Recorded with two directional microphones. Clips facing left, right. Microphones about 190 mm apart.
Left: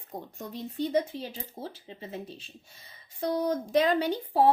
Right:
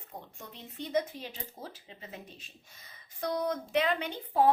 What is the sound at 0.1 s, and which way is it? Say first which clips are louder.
A woman's voice: left 8 dB; 40° left (ahead or behind).